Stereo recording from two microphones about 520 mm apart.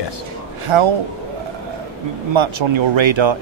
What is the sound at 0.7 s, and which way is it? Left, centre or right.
Speech, right.